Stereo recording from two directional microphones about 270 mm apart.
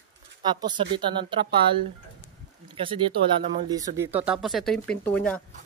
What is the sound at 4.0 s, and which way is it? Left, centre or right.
Speech, centre.